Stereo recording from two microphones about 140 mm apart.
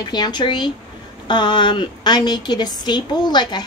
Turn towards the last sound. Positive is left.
turn(degrees=30)  # may be behind; listen again after turning